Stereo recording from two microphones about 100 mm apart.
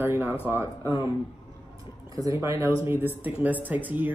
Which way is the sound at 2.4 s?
25° right (ahead or behind).